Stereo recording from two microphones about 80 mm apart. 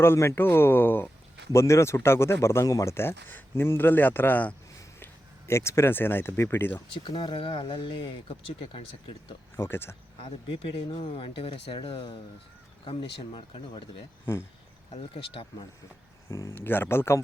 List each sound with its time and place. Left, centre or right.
0.0 s speech: left
1.5 s speech: left
2.9 s speech: left
6.9 s speech: left
9.6 s speech: left
11.2 s speech: left
14.3 s speech: left
15.1 s speech: left
16.6 s speech: left